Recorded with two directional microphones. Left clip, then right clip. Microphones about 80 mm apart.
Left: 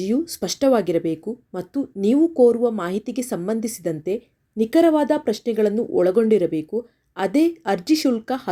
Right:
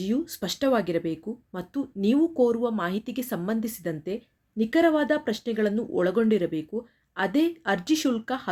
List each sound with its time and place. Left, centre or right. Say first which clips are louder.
0.0 s a woman's voice: left 6 dB; left
1.7 s a woman's voice: left 5 dB; left